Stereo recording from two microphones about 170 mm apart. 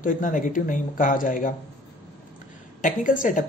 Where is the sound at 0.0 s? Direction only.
50° left (ahead or behind).